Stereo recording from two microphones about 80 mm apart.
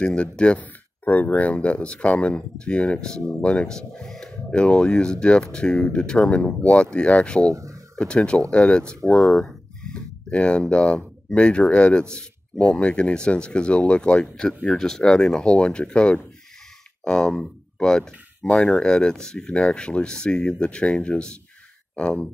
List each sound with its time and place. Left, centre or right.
0.0 s speech: centre
7.4 s speech: right
7.9 s speech: centre